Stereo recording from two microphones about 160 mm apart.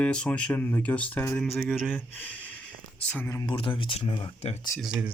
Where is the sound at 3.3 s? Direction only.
25° left (ahead or behind).